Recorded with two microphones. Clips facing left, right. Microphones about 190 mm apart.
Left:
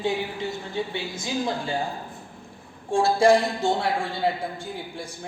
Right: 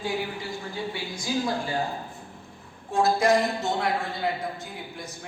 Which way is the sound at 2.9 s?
30° left (ahead or behind).